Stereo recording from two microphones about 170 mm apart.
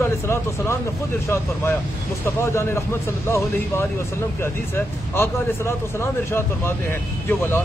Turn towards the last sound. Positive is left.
turn(degrees=10)  # may be behind; listen again after turning